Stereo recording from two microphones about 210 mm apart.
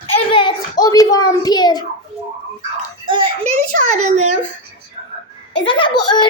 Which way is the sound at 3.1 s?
25° right (ahead or behind).